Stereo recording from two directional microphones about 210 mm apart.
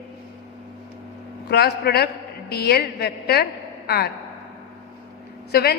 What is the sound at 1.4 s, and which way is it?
A woman's voice, 50° left (ahead or behind).